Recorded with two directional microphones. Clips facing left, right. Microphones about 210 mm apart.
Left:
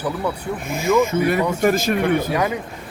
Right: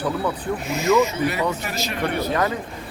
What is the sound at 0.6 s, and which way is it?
Speech, 50° left (ahead or behind).